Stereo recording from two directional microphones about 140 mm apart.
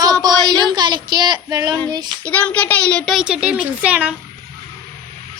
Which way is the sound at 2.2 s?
10° left (ahead or behind).